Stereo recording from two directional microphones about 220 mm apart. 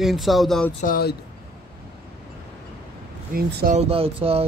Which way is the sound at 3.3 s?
40° right (ahead or behind).